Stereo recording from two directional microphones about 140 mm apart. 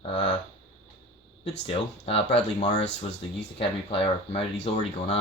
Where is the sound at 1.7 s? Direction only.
45° left (ahead or behind).